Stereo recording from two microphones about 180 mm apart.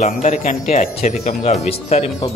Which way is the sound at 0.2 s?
45° left (ahead or behind).